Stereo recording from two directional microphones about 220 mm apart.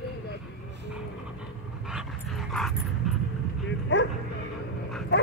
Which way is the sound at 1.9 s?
Centre (ahead or behind).